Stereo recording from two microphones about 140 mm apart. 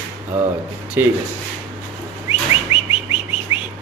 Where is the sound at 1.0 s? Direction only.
15° right (ahead or behind).